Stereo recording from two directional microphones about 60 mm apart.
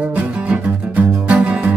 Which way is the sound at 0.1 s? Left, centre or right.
Right.